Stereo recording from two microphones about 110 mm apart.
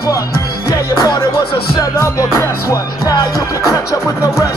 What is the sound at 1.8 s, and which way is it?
Music, 30° left (ahead or behind).